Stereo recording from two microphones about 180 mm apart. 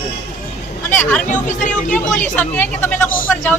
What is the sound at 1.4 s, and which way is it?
Speech, 45° left (ahead or behind).